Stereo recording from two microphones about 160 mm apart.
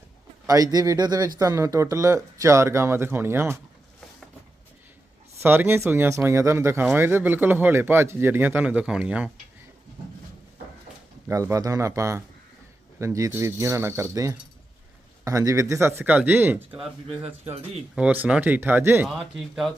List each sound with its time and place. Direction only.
0.4 s a man's voice: 20° right (ahead or behind)
5.4 s a man's voice: 15° right (ahead or behind)
11.3 s a man's voice: 20° right (ahead or behind)
17.9 s a man's voice: 10° right (ahead or behind)
19.0 s speech: centre (ahead or behind)